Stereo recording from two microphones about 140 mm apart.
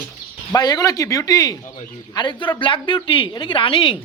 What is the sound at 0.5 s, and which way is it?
Speech, 30° left (ahead or behind).